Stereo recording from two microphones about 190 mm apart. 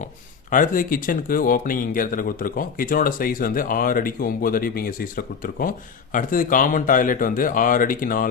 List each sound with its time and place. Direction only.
0.5 s speech: 45° left (ahead or behind)